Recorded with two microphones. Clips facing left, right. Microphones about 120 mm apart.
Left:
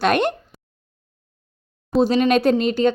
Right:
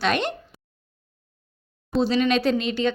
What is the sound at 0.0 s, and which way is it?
Speech, 50° left (ahead or behind).